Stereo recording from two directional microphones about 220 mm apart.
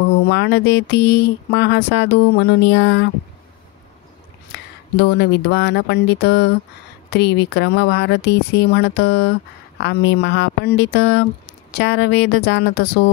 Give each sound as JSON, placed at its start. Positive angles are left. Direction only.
{"t": 0.2, "sound": "speech", "side_deg": 50}
{"t": 4.5, "sound": "speech", "side_deg": 50}